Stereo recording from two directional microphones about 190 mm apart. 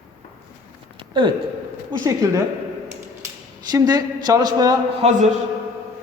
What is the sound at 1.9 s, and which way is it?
Speech, 15° right (ahead or behind).